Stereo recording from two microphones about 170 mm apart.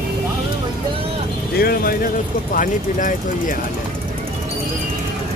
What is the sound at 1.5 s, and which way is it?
Speech, 60° left (ahead or behind).